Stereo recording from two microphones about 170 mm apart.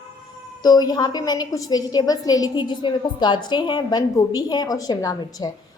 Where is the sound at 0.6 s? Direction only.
25° left (ahead or behind).